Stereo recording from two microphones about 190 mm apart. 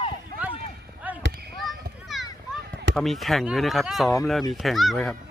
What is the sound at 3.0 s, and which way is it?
Speech, centre (ahead or behind).